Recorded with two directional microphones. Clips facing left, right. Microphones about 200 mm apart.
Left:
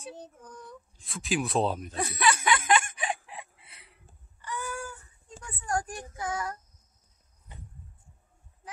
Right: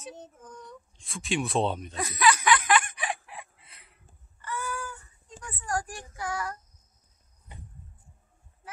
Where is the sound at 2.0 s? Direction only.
25° left (ahead or behind).